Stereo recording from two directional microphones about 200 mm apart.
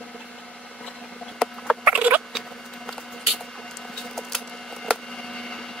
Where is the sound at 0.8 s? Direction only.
5° left (ahead or behind).